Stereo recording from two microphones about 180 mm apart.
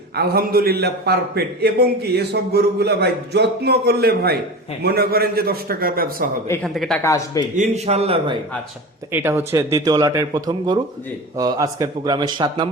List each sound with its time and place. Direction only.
0.2 s a man's voice: 60° right (ahead or behind)
6.5 s speech: 5° left (ahead or behind)
7.0 s speech: 20° left (ahead or behind)
7.5 s a man's voice: 40° right (ahead or behind)
9.1 s a man's voice: 15° right (ahead or behind)